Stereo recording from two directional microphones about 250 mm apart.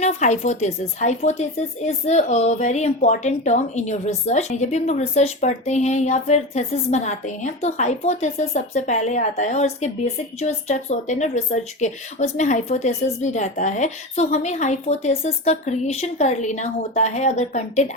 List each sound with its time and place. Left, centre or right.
0.0 s a woman's voice: left